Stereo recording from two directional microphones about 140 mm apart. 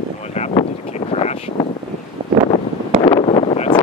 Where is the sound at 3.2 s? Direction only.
45° left (ahead or behind).